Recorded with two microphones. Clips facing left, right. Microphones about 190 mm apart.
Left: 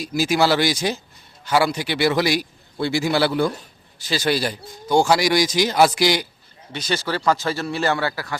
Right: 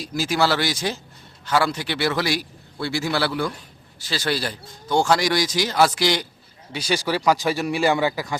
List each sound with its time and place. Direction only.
0.0 s speech: 10° left (ahead or behind)
6.7 s a man's voice: 10° right (ahead or behind)